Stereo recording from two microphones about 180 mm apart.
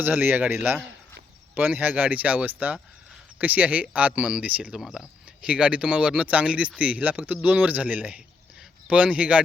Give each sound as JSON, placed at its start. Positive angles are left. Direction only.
{"t": 0.0, "sound": "speech", "side_deg": -10}